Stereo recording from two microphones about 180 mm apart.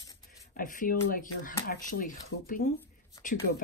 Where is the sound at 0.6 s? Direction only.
50° left (ahead or behind).